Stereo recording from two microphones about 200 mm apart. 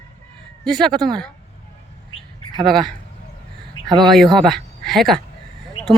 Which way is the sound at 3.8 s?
90° left.